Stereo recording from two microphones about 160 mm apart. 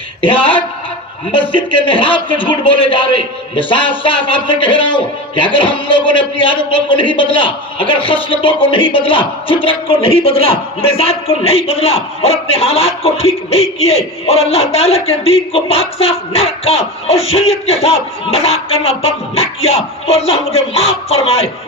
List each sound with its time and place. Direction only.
0.2 s a man's voice: 30° left (ahead or behind)